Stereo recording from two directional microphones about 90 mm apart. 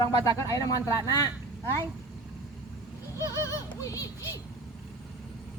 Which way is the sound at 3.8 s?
35° left (ahead or behind).